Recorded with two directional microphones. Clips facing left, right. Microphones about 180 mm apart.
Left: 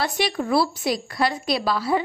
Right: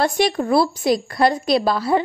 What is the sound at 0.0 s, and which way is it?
A woman's voice, 50° right (ahead or behind).